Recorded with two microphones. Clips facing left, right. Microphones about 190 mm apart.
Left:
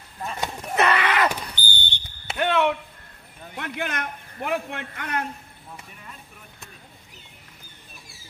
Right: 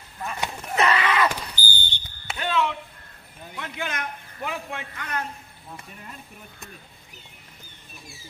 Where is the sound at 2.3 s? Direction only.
60° left (ahead or behind).